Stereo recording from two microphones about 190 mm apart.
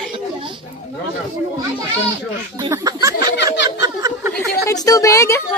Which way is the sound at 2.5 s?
20° right (ahead or behind).